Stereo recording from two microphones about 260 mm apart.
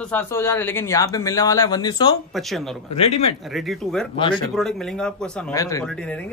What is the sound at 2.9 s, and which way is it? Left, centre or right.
Speech, left.